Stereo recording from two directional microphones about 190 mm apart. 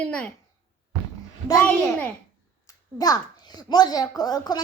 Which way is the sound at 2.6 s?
20° left (ahead or behind).